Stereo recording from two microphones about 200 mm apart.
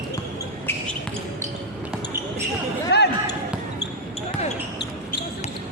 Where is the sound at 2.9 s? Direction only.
55° left (ahead or behind).